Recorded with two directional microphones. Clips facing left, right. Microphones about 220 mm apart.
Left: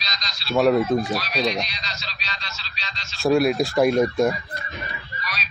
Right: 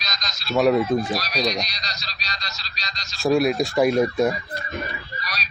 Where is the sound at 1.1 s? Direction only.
40° right (ahead or behind).